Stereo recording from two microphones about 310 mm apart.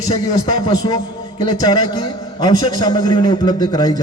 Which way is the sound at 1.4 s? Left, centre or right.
Centre.